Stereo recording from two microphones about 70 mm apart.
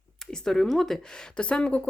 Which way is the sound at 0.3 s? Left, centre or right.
Centre.